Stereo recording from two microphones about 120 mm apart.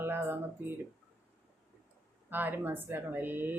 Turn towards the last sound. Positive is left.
turn(degrees=-15)  # may be behind; listen again after turning